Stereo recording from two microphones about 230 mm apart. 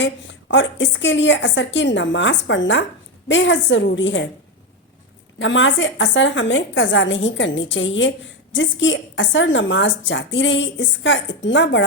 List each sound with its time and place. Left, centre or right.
0.0 s a woman's voice: left
5.4 s a woman's voice: left